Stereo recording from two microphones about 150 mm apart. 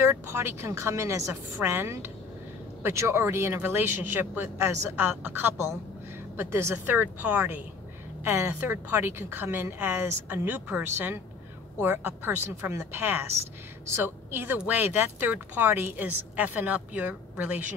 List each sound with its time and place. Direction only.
0.0 s speech: 15° right (ahead or behind)